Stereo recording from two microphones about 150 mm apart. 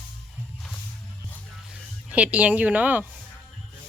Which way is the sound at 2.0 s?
10° right (ahead or behind).